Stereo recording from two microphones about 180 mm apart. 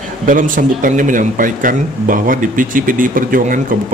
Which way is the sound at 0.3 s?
45° right (ahead or behind).